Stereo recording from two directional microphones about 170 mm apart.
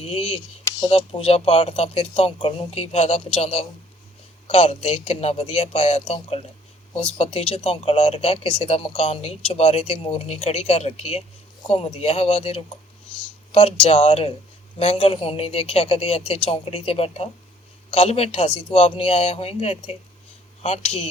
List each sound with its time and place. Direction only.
0.0 s speech: 35° left (ahead or behind)